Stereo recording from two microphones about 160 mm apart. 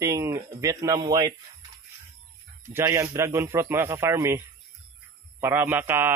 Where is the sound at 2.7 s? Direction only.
15° right (ahead or behind).